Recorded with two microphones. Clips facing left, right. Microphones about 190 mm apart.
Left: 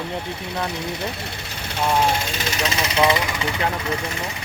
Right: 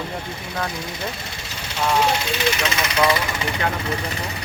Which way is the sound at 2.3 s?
40° left (ahead or behind).